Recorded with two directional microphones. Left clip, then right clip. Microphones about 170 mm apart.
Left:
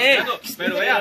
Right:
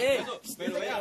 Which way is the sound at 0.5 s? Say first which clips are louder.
Left 12 dB; 15° left (ahead or behind).